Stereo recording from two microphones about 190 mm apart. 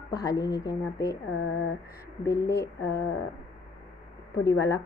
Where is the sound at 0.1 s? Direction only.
20° left (ahead or behind).